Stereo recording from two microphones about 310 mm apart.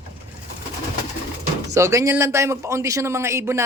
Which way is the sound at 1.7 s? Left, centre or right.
Centre.